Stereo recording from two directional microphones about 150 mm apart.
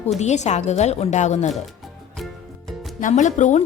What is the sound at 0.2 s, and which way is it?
A woman's voice, 50° left (ahead or behind).